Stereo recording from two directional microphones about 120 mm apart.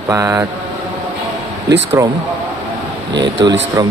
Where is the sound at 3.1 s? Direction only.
35° right (ahead or behind).